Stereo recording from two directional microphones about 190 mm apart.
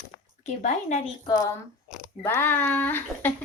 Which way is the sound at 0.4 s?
40° left (ahead or behind).